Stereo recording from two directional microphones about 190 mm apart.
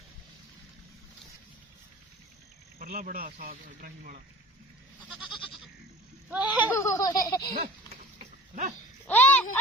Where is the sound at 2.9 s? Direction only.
40° right (ahead or behind).